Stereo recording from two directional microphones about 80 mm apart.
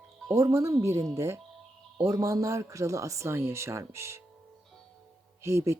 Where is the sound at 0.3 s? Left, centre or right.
Right.